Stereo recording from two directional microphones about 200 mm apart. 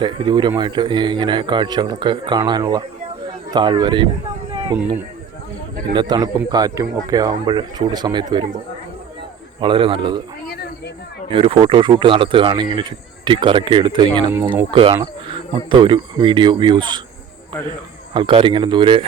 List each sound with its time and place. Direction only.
0.0 s speech: 20° right (ahead or behind)
4.7 s speech: 10° right (ahead or behind)
5.9 s speech: 20° right (ahead or behind)
9.6 s speech: 25° right (ahead or behind)
10.5 s a sound: 55° left (ahead or behind)
11.3 s speech: 25° right (ahead or behind)
18.1 s speech: 25° right (ahead or behind)